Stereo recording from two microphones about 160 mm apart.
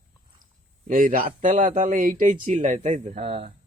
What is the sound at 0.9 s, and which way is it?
Speech, 55° right (ahead or behind).